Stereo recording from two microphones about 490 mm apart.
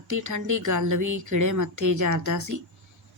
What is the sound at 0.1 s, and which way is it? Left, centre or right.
Speech, right.